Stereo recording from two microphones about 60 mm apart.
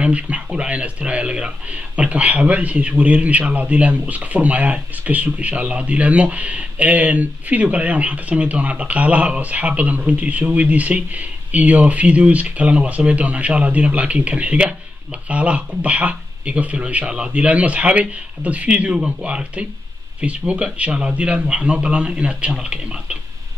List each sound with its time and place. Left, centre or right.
0.0 s speech: right